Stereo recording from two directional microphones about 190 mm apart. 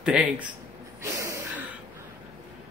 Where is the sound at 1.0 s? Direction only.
15° right (ahead or behind).